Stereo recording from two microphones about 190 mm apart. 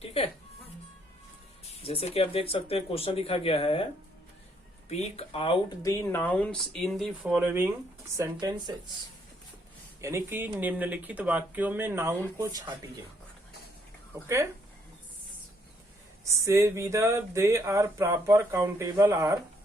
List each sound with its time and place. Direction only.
0.0 s music: 30° left (ahead or behind)
1.8 s speech: 30° left (ahead or behind)
4.9 s speech: 35° left (ahead or behind); by 8.5 s 20° right (ahead or behind)
10.0 s speech: 15° right (ahead or behind)
16.4 s speech: 15° right (ahead or behind)